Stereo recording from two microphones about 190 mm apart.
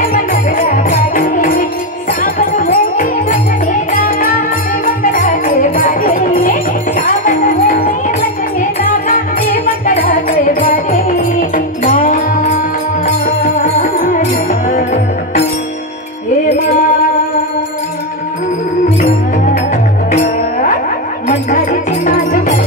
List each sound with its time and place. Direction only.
0.0 s music: 45° left (ahead or behind)
21.3 s music: 45° left (ahead or behind)